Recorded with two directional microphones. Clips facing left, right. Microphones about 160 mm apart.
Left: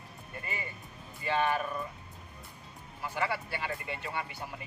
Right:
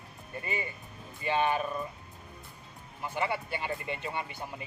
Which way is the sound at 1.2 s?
20° right (ahead or behind).